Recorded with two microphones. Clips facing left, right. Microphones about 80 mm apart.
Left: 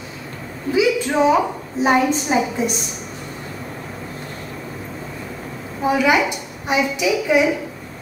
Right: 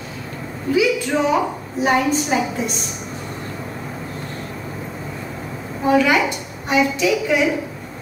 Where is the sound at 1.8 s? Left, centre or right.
Centre.